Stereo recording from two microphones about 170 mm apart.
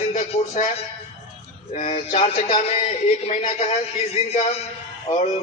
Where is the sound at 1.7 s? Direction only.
40° left (ahead or behind).